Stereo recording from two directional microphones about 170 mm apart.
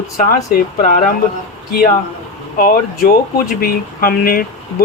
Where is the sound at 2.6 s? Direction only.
60° left (ahead or behind).